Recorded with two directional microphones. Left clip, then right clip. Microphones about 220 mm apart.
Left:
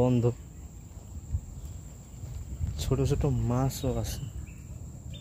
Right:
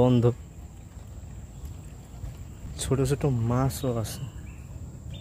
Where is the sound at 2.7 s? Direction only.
10° right (ahead or behind).